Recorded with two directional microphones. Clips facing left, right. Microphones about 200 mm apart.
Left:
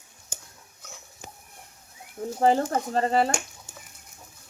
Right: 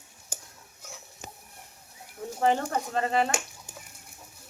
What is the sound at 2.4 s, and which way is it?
Speech, 35° left (ahead or behind).